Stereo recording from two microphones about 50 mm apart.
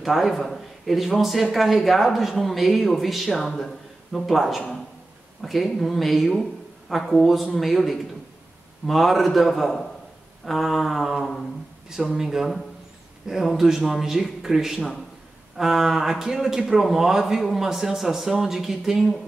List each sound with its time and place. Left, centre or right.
0.0 s a man's voice: centre
11.9 s a man's voice: centre